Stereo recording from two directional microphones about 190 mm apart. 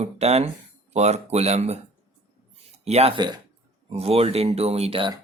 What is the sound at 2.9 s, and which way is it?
Speech, 30° right (ahead or behind).